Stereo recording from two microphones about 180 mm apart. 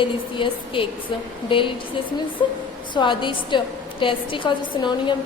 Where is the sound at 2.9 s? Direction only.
25° left (ahead or behind).